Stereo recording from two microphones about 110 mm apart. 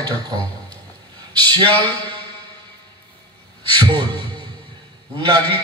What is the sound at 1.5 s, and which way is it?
Speech, 50° right (ahead or behind).